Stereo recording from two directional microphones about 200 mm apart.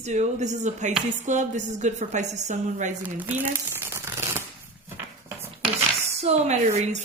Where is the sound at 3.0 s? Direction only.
10° right (ahead or behind).